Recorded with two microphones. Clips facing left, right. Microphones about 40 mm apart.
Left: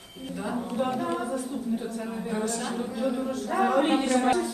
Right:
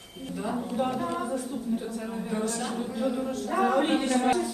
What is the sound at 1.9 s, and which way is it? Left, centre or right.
A woman's voice, centre.